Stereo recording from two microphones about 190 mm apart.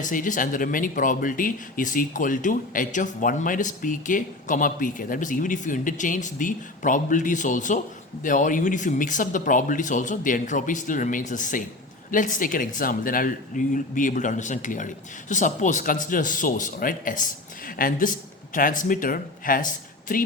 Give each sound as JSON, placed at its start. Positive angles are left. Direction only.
{"t": 0.0, "sound": "speech", "side_deg": 45}